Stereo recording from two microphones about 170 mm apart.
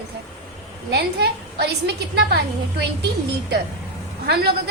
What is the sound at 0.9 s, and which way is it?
A woman's voice, 80° right.